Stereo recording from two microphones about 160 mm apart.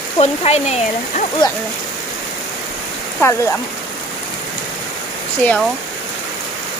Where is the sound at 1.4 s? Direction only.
30° left (ahead or behind).